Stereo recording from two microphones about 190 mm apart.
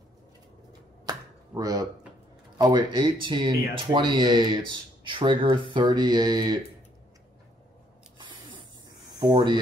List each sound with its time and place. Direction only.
1.0 s finger snapping: 20° right (ahead or behind)
2.6 s speech: 25° right (ahead or behind)
8.2 s a sound: 25° right (ahead or behind)
9.2 s speech: 25° right (ahead or behind)